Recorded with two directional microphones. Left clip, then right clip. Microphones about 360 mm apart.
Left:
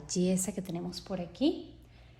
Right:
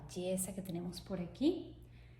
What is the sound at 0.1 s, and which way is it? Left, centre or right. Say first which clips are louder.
Speech: left 7 dB; left.